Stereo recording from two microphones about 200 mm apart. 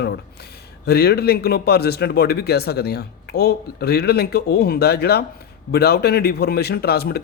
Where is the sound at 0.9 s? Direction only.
55° left (ahead or behind).